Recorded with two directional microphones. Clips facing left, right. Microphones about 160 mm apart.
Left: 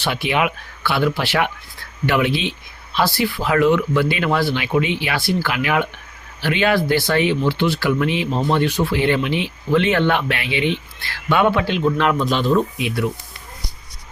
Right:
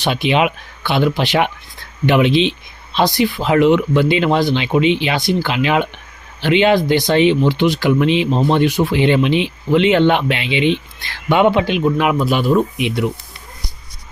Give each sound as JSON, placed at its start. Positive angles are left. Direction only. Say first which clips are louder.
{"t": 0.0, "sound": "speech", "louder": "right 4 dB", "side_deg": -20}